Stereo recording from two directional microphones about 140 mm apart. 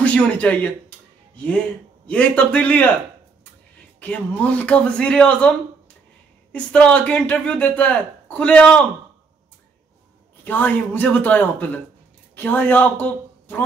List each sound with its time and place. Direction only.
0.0 s music: 10° left (ahead or behind)
2.0 s speech: 10° left (ahead or behind)
4.0 s speech: 10° left (ahead or behind)
6.5 s speech: 10° left (ahead or behind)
10.4 s a man's voice: 10° left (ahead or behind)